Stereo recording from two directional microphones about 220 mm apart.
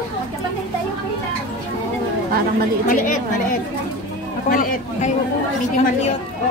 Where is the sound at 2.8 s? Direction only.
35° left (ahead or behind).